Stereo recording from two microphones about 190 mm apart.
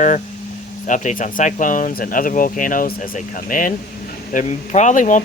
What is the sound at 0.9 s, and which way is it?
Speech, 40° left (ahead or behind).